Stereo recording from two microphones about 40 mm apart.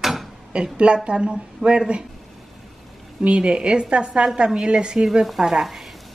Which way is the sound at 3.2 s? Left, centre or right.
Right.